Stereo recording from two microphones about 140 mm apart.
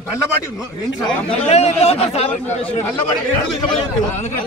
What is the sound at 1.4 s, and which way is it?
Speech, 50° left (ahead or behind).